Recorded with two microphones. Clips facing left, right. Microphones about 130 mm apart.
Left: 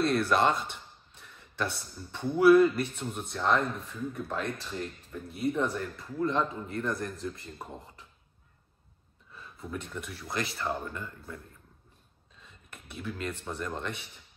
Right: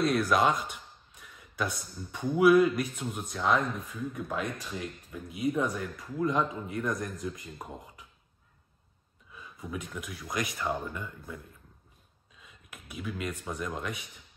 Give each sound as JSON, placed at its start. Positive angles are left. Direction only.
{"t": 0.0, "sound": "a sound", "side_deg": 0}
{"t": 2.3, "sound": "speech", "side_deg": 0}
{"t": 6.5, "sound": "speech", "side_deg": 0}
{"t": 9.6, "sound": "speech", "side_deg": -5}
{"t": 10.3, "sound": "speech", "side_deg": -15}
{"t": 10.6, "sound": "speech", "side_deg": -5}